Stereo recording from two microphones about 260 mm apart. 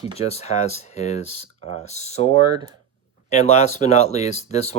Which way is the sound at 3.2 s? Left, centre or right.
Left.